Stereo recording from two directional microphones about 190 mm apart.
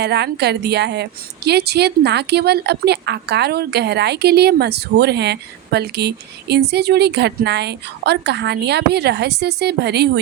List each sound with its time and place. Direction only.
0.0 s a woman's voice: 60° right (ahead or behind)